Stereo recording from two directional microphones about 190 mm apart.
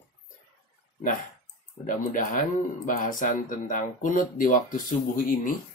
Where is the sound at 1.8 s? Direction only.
45° left (ahead or behind).